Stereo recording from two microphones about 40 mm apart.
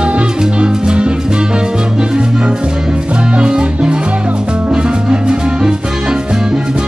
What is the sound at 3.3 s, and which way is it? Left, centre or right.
Music, right.